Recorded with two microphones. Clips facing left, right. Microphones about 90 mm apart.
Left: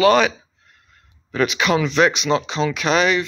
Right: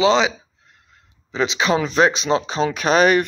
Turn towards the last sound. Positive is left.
turn(degrees=-40)  # may be behind; listen again after turning